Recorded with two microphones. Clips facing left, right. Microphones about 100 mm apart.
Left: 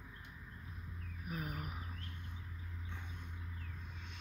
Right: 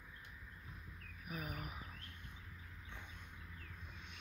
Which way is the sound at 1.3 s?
40° left (ahead or behind).